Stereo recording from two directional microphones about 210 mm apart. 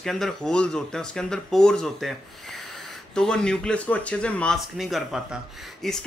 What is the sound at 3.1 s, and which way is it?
Speech, 5° left (ahead or behind).